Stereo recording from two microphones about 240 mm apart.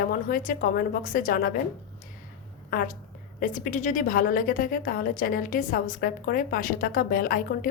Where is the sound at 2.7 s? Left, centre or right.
Left.